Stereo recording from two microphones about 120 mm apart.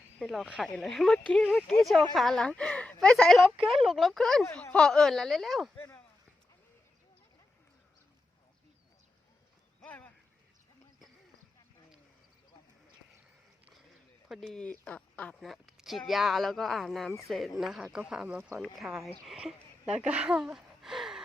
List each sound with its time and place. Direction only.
0.2 s speech: centre (ahead or behind)
5.7 s speech: 20° left (ahead or behind)
9.8 s a sound: 15° left (ahead or behind)
14.3 s speech: centre (ahead or behind)
14.6 s speech: 10° left (ahead or behind)
15.4 s speech: centre (ahead or behind)